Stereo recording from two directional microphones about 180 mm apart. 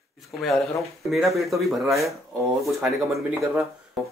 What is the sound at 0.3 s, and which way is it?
A man's voice, centre (ahead or behind).